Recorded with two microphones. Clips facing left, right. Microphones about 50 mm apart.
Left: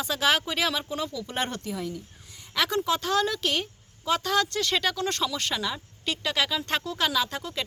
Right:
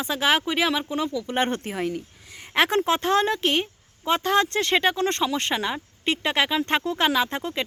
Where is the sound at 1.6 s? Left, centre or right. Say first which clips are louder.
Right 5 dB; right.